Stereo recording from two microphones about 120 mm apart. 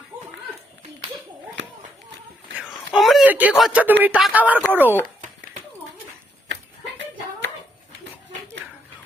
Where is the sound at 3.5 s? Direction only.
Centre (ahead or behind).